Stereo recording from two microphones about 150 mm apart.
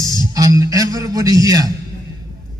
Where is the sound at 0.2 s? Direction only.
25° right (ahead or behind).